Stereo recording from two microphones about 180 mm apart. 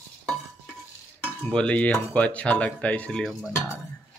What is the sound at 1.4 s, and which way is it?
Speech, 5° left (ahead or behind).